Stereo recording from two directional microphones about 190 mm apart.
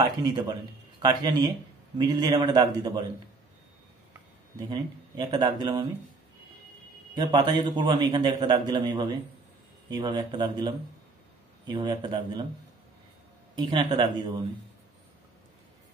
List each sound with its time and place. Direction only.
0.0 s speech: 20° right (ahead or behind)
4.6 s speech: 20° right (ahead or behind)
7.2 s speech: 20° right (ahead or behind)
13.6 s speech: 25° right (ahead or behind)